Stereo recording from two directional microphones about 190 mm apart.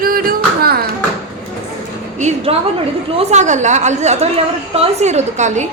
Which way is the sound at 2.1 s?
35° right (ahead or behind).